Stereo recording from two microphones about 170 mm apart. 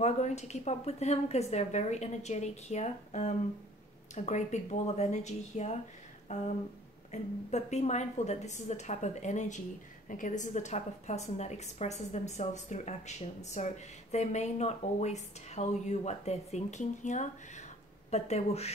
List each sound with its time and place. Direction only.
0.0 s a woman's voice: 40° left (ahead or behind)
6.2 s a sound: 45° left (ahead or behind)
7.1 s a woman's voice: 40° left (ahead or behind)